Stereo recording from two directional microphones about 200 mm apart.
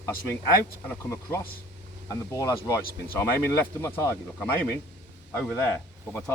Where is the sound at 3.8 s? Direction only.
15° left (ahead or behind).